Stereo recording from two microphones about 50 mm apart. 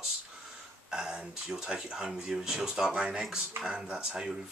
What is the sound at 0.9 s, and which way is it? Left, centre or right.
Speech, centre.